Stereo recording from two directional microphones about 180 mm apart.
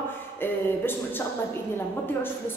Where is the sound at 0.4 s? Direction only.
10° left (ahead or behind).